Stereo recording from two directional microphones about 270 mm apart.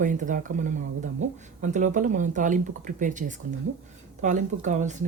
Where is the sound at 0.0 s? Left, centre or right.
Right.